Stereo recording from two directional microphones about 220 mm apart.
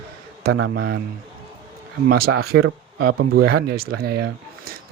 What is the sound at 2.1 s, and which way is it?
Speech, 45° right (ahead or behind).